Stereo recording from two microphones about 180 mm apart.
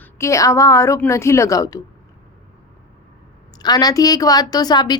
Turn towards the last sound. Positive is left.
turn(degrees=25)  # may be behind; listen again after turning